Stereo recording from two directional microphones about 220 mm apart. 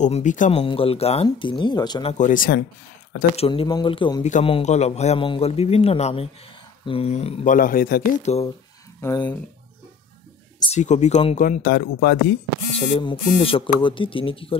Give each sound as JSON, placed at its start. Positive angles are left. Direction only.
{"t": 0.0, "sound": "speech", "side_deg": 35}
{"t": 2.1, "sound": "speech", "side_deg": 35}
{"t": 3.3, "sound": "speech", "side_deg": 25}
{"t": 9.0, "sound": "speech", "side_deg": 15}
{"t": 10.7, "sound": "speech", "side_deg": 30}
{"t": 12.7, "sound": "speech", "side_deg": 25}